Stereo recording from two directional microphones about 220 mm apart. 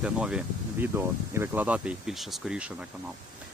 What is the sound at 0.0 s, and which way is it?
Speech, 5° right (ahead or behind).